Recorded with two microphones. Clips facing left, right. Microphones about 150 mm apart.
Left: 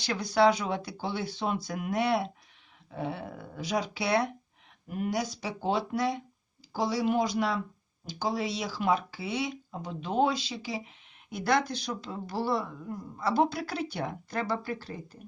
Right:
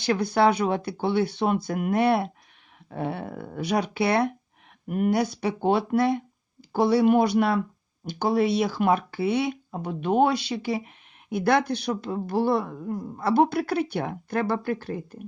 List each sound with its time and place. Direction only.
0.0 s speech: 55° right (ahead or behind)